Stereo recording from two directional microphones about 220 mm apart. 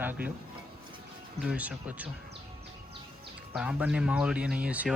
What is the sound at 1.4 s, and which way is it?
Speech, 5° right (ahead or behind).